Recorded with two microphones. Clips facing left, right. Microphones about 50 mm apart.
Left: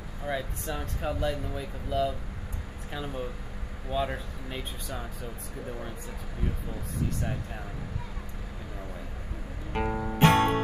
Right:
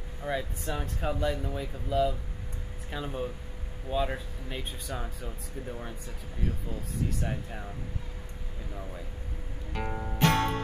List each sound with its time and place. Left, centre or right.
0.2 s speech: centre
7.2 s speech: centre
9.8 s music: centre
10.1 s music: left